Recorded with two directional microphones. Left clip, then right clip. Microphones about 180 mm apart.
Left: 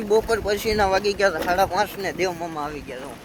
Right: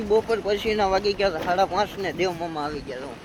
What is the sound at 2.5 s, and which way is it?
Speech, 20° right (ahead or behind).